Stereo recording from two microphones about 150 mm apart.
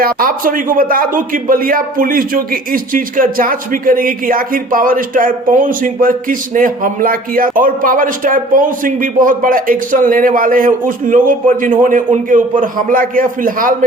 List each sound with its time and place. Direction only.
0.0 s speech: 70° right (ahead or behind)